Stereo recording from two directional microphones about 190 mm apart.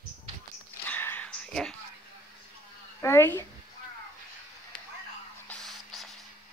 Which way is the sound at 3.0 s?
15° left (ahead or behind).